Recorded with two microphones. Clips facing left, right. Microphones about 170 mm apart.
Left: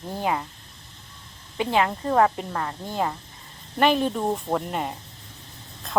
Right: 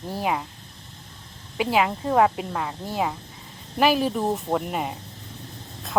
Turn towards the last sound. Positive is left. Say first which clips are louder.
# right 1 dB
turn(degrees=-5)  # may be behind; listen again after turning